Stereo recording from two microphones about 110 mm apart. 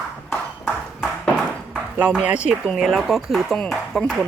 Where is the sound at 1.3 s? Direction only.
10° right (ahead or behind).